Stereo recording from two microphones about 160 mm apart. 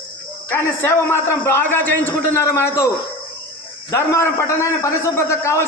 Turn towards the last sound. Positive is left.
turn(degrees=15)  # may be behind; listen again after turning